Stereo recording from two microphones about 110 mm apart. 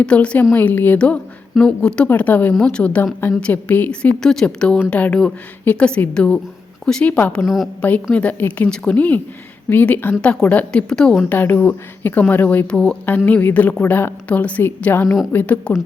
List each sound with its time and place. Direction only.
0.0 s a woman's voice: 10° left (ahead or behind)
7.4 s a woman's voice: centre (ahead or behind)
7.8 s a woman's voice: 15° left (ahead or behind)
11.3 s a woman's voice: 15° left (ahead or behind)